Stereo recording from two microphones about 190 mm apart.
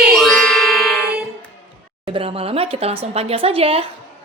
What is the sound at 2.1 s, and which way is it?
Speech, 30° right (ahead or behind).